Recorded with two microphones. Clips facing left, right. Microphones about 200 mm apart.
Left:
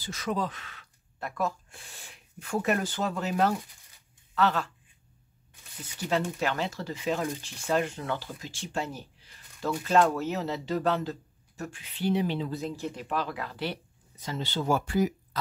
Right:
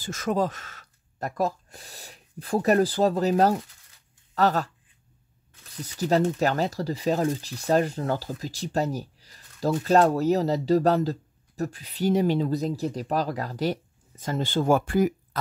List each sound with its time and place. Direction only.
0.0 s speech: 45° right (ahead or behind)
5.8 s speech: 40° right (ahead or behind)